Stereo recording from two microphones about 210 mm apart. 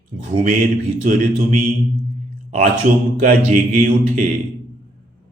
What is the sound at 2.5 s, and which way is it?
A man's voice, 40° right (ahead or behind).